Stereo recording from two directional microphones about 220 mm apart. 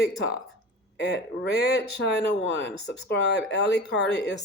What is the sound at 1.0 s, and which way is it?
Speech, 50° left (ahead or behind).